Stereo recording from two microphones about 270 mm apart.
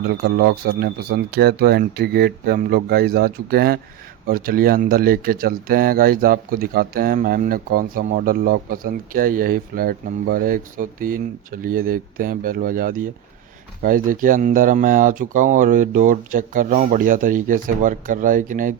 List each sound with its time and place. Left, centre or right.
0.1 s speech: right